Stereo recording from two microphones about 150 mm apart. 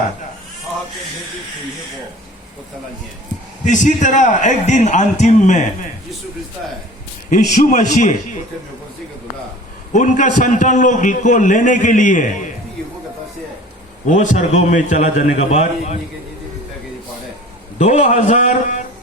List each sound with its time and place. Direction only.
3.7 s a man's voice: 55° left (ahead or behind)
7.3 s a man's voice: 55° left (ahead or behind)
9.9 s a man's voice: 55° left (ahead or behind)
14.1 s a man's voice: 55° left (ahead or behind)
17.7 s a man's voice: 50° left (ahead or behind)